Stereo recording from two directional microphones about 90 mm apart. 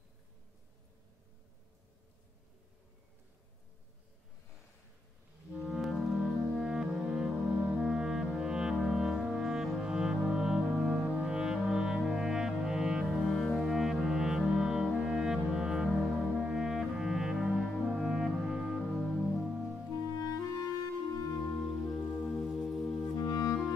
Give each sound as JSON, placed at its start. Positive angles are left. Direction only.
{"t": 5.5, "sound": "music", "side_deg": 0}
{"t": 17.8, "sound": "french horn", "side_deg": -5}
{"t": 18.8, "sound": "music", "side_deg": 5}
{"t": 20.2, "sound": "clarinet", "side_deg": 40}
{"t": 22.2, "sound": "music", "side_deg": 5}
{"t": 23.1, "sound": "clarinet", "side_deg": 45}